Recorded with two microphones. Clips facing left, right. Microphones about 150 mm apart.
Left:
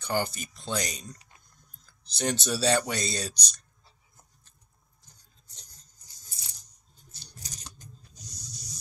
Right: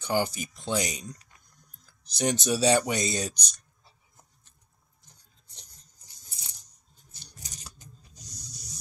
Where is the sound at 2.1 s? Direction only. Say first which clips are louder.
Right 3 dB; 15° right (ahead or behind).